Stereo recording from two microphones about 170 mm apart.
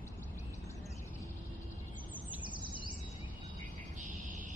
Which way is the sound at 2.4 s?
30° right (ahead or behind).